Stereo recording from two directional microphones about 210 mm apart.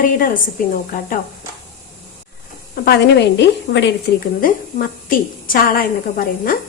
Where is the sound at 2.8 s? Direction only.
55° left (ahead or behind).